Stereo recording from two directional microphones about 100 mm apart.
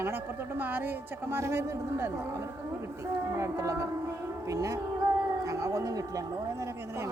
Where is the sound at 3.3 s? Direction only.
30° right (ahead or behind).